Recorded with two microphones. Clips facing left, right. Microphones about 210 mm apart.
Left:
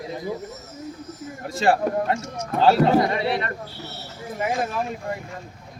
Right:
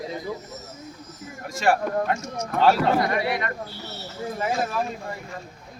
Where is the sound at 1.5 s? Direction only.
35° left (ahead or behind).